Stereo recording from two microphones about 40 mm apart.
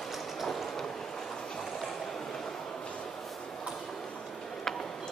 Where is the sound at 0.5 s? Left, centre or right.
Centre.